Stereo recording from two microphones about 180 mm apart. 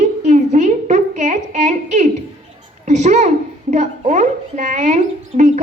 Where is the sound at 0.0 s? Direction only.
40° right (ahead or behind).